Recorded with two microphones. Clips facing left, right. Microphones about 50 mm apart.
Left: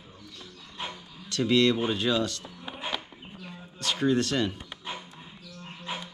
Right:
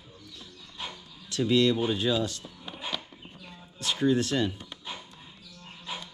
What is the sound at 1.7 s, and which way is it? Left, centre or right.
Speech, centre.